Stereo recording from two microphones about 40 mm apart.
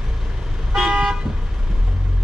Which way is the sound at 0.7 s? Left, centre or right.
Centre.